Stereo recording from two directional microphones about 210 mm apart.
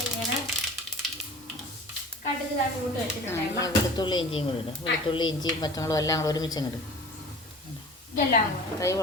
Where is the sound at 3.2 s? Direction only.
15° left (ahead or behind).